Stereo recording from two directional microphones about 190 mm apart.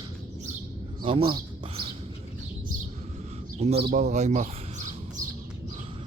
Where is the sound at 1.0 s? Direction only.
25° right (ahead or behind).